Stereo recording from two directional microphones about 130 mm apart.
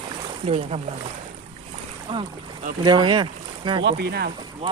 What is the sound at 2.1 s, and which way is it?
Speech, 45° right (ahead or behind).